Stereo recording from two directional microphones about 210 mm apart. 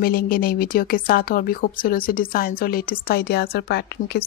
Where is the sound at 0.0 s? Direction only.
45° left (ahead or behind).